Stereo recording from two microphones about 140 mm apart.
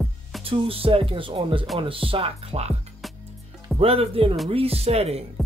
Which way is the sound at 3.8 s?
45° right (ahead or behind).